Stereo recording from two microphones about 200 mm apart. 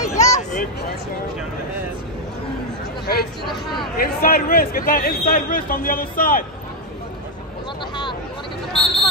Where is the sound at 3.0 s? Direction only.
50° left (ahead or behind).